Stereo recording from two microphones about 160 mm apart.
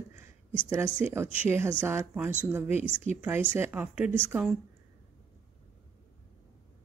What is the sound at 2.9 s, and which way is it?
Speech, 45° left (ahead or behind).